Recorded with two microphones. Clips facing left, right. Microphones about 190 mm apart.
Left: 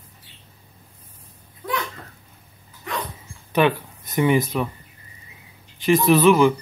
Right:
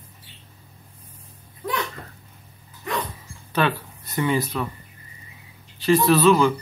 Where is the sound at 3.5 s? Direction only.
15° left (ahead or behind).